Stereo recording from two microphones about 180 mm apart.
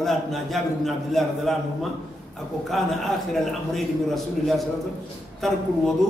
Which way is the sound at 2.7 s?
Centre (ahead or behind).